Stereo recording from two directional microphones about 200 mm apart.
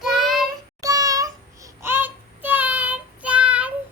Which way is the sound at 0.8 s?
15° right (ahead or behind).